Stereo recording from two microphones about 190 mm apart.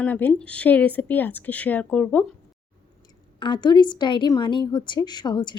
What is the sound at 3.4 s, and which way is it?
Speech, 25° left (ahead or behind).